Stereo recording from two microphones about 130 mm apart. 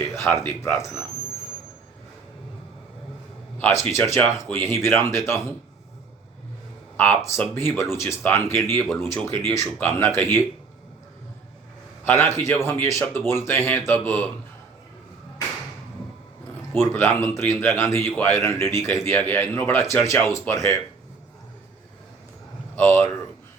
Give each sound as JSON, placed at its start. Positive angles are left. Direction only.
{"t": 0.0, "sound": "a sound", "side_deg": 20}
{"t": 0.4, "sound": "a man's voice", "side_deg": 20}
{"t": 3.6, "sound": "a man's voice", "side_deg": 20}
{"t": 6.9, "sound": "a man's voice", "side_deg": 15}
{"t": 12.0, "sound": "a man's voice", "side_deg": 20}
{"t": 16.7, "sound": "a man's voice", "side_deg": 20}
{"t": 22.7, "sound": "speech", "side_deg": 15}